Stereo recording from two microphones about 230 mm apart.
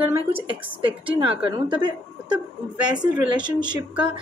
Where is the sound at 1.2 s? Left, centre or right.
Right.